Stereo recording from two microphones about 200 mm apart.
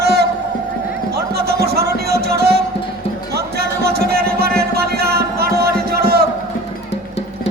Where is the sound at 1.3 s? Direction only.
50° right (ahead or behind).